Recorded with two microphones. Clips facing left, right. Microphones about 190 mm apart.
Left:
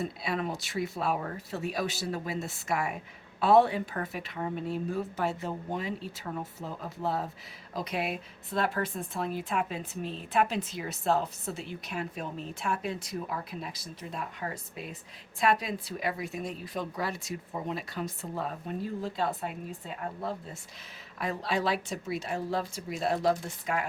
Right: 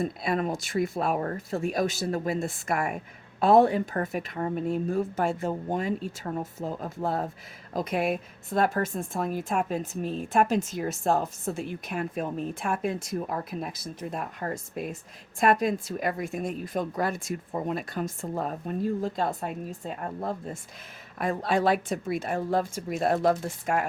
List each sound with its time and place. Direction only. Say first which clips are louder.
0.0 s speech: right 5 dB; 50° right (ahead or behind)